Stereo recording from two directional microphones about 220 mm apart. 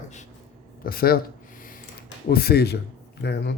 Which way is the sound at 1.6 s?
40° left (ahead or behind).